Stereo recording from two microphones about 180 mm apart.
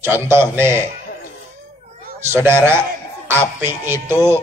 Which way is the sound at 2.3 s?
10° right (ahead or behind).